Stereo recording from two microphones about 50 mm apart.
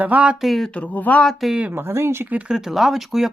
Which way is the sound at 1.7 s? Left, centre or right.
Right.